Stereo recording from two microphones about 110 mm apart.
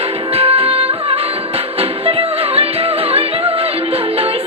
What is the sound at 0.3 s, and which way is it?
Music, 60° right (ahead or behind).